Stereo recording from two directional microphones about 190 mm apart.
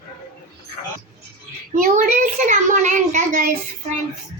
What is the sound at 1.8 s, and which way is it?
A child's voice, 45° right (ahead or behind).